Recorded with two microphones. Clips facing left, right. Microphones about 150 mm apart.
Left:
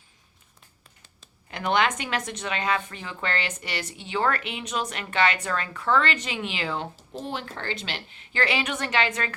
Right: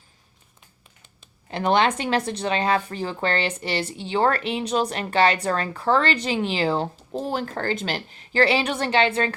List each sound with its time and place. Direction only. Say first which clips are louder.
1.5 s a woman's voice: right 4 dB; 30° right (ahead or behind)